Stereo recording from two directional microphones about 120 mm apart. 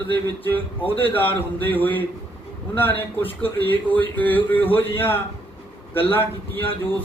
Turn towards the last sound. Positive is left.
turn(degrees=15)  # may be behind; listen again after turning